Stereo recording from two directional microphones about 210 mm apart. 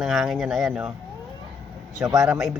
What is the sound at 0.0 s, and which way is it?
Speech, centre (ahead or behind).